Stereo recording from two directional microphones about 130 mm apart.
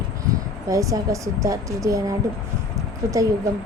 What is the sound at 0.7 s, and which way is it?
Speech, 25° right (ahead or behind).